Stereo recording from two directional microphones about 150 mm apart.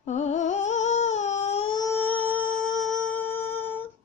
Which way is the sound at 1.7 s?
25° left (ahead or behind).